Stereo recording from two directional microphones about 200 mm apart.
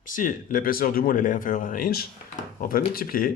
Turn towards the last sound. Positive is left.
turn(degrees=45)  # may be behind; listen again after turning